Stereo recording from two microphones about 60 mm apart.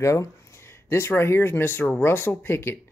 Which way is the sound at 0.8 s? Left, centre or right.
Left.